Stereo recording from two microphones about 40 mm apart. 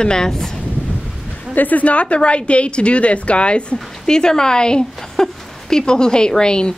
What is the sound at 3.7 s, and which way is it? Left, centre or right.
Speech, centre.